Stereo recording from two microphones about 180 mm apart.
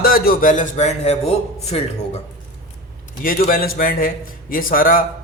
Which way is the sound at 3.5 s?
55° left (ahead or behind).